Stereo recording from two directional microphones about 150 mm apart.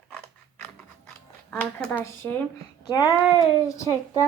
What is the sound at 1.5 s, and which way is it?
Speech, 10° left (ahead or behind).